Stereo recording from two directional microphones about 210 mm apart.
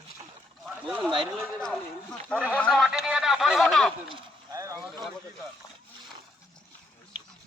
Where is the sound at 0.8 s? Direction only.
Centre (ahead or behind).